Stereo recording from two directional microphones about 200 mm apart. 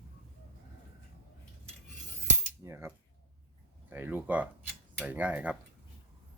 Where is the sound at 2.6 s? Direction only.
15° right (ahead or behind).